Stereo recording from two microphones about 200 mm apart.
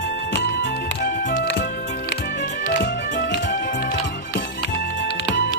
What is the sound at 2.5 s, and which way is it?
Music, 40° left (ahead or behind).